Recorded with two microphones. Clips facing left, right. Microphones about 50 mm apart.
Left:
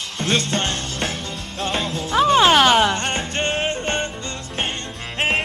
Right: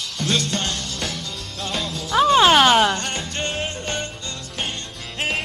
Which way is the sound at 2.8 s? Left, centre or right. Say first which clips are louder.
Left 2 dB; left.